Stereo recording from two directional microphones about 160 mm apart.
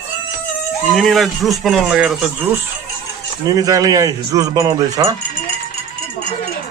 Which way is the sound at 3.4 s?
20° right (ahead or behind).